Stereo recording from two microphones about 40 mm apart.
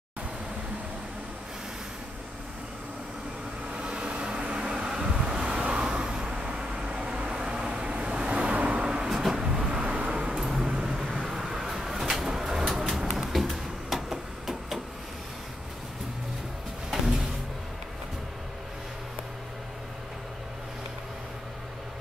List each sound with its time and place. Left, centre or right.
3.7 s vehicle: right
10.3 s vehicle: centre
11.1 s a sound: centre